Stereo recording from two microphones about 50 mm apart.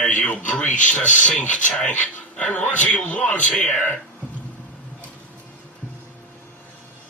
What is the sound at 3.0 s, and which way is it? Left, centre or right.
Gasp, left.